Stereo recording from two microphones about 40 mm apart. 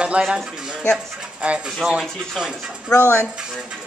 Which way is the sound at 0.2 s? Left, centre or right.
Right.